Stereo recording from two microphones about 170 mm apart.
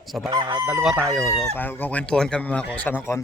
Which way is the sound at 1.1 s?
20° left (ahead or behind).